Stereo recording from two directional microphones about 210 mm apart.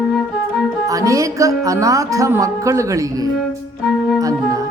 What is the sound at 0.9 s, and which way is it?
A woman's voice, 15° right (ahead or behind).